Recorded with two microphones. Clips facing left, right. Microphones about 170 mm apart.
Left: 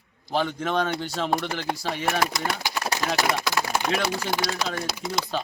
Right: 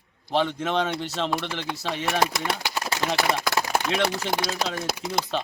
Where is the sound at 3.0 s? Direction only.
25° right (ahead or behind).